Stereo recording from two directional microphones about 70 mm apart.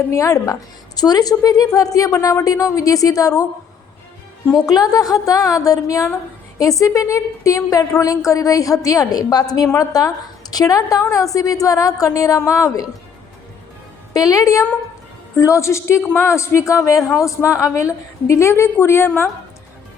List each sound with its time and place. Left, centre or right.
0.1 s a woman's voice: left
0.9 s a woman's voice: left
4.5 s a woman's voice: left
14.1 s a woman's voice: left